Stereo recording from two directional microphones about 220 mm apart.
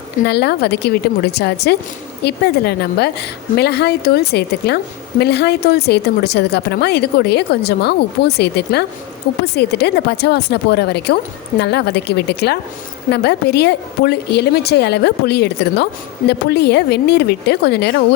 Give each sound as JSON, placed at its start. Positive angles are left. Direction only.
{"t": 0.3, "sound": "speech", "side_deg": 50}